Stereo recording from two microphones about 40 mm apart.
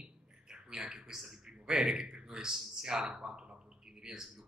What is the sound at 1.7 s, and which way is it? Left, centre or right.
A man's voice, centre.